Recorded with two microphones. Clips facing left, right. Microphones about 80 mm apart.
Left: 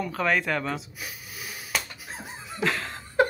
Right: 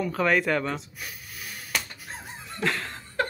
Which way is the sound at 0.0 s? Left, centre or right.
Centre.